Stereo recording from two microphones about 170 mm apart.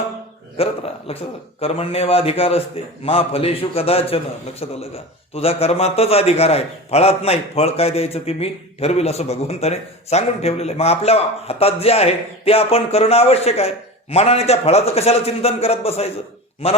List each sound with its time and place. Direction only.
0.5 s a man's voice: 35° left (ahead or behind)